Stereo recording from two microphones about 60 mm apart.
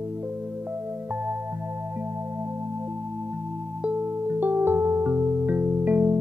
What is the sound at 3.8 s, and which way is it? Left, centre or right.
Music, right.